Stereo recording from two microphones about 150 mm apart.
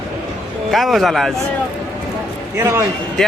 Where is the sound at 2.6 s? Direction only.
15° right (ahead or behind).